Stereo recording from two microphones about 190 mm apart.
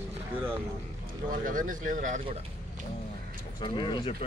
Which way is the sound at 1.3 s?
45° right (ahead or behind).